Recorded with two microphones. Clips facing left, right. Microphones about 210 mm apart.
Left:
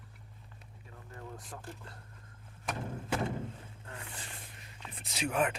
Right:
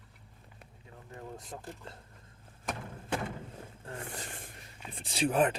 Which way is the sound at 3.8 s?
45° right (ahead or behind).